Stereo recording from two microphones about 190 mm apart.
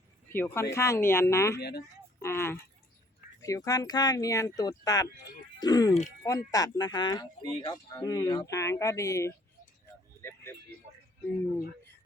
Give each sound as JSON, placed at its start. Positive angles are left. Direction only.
{"t": 0.3, "sound": "speech", "side_deg": 10}
{"t": 5.9, "sound": "speech", "side_deg": 40}
{"t": 6.2, "sound": "speech", "side_deg": 20}